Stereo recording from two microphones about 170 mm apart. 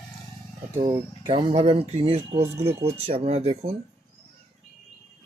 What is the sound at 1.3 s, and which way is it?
Speech, 30° right (ahead or behind).